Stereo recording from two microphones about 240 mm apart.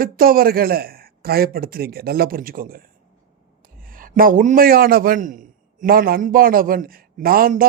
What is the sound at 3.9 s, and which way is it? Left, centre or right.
A man's voice, right.